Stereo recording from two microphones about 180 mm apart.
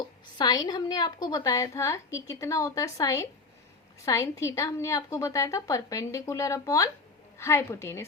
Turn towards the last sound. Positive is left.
turn(degrees=15)  # may be behind; listen again after turning